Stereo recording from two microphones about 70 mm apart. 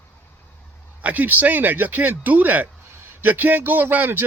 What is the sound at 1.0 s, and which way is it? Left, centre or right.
Speech, right.